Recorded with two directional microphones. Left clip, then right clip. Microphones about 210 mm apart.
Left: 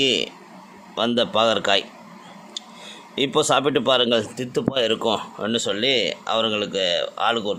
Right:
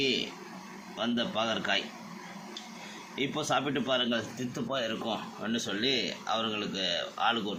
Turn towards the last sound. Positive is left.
turn(degrees=55)  # may be behind; listen again after turning